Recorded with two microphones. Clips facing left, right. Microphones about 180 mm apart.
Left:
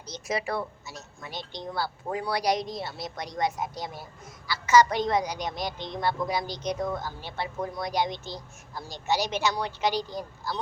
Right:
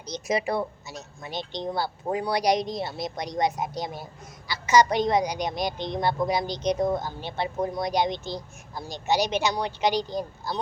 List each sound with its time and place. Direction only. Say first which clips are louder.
0.0 s speech: right 4 dB; 15° right (ahead or behind)